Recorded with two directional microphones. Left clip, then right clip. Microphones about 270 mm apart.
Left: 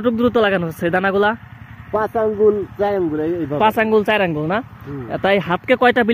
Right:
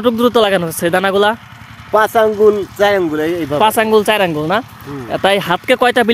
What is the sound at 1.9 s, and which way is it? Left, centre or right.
Speech, right.